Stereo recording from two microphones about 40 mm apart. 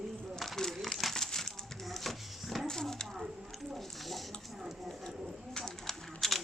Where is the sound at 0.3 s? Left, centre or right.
Centre.